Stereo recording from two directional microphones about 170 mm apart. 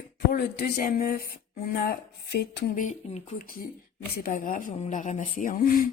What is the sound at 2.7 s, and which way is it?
Speech, 45° left (ahead or behind).